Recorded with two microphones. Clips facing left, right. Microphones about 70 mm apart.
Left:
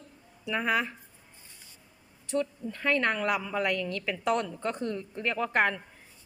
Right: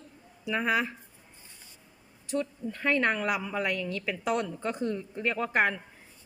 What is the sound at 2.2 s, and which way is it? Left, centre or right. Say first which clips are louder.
Speech: left 1 dB; centre.